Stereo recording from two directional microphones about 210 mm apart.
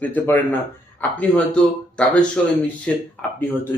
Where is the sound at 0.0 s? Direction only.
10° left (ahead or behind).